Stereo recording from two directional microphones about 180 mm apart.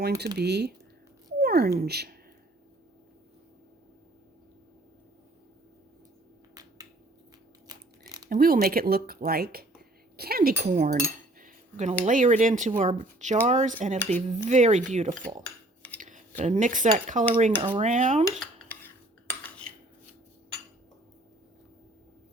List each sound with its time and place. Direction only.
0.3 s speech: 65° right (ahead or behind)
1.4 s cat: 60° right (ahead or behind)
1.8 s speech: 60° right (ahead or behind)
6.5 s finger snapping: 20° right (ahead or behind)
7.7 s a sound: 20° right (ahead or behind)
8.3 s speech: 55° right (ahead or behind)
10.6 s speech: 40° right (ahead or behind)
11.0 s cutlery: 50° right (ahead or behind)
12.0 s speech: 45° right (ahead or behind)
15.4 s cutlery: 10° left (ahead or behind)
16.0 s speech: 45° right (ahead or behind)
17.6 s speech: 30° right (ahead or behind)
17.8 s speech: 45° right (ahead or behind)
18.3 s dishes: 5° left (ahead or behind)